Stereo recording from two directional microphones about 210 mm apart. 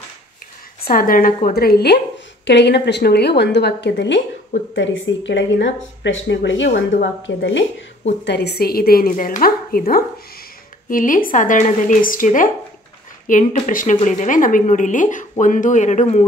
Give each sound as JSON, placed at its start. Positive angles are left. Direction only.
{"t": 0.8, "sound": "a woman's voice", "side_deg": 40}
{"t": 8.3, "sound": "speech", "side_deg": 50}